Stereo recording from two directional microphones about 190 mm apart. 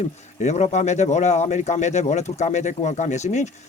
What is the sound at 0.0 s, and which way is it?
Speech, 35° left (ahead or behind).